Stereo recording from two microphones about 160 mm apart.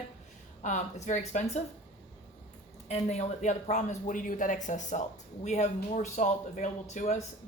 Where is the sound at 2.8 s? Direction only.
45° left (ahead or behind).